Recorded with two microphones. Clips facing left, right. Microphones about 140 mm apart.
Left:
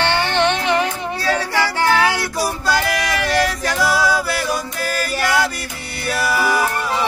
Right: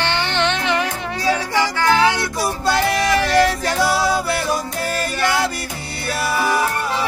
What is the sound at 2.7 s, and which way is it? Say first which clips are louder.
Music: right 5 dB; 30° right (ahead or behind).